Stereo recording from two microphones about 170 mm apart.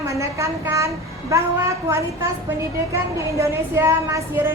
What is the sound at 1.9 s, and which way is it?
A woman's voice, 15° right (ahead or behind).